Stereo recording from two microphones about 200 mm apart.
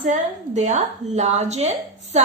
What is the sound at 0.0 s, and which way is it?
A woman's voice, 35° right (ahead or behind).